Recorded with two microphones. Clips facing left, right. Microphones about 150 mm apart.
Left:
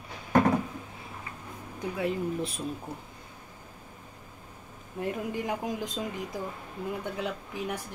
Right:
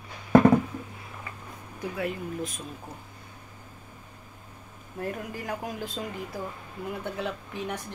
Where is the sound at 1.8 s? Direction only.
30° left (ahead or behind).